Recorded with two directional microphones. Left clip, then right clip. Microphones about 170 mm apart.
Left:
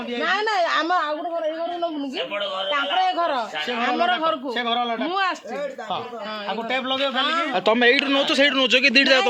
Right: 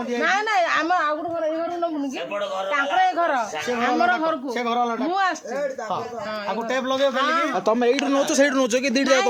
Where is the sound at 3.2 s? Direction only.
45° left (ahead or behind).